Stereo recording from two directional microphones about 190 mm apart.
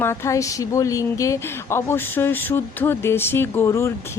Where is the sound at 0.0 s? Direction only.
15° left (ahead or behind).